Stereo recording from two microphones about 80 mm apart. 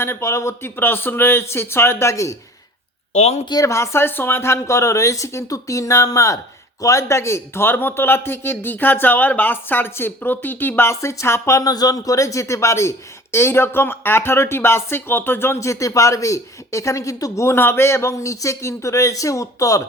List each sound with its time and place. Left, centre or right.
0.0 s speech: left
3.5 s a man's voice: left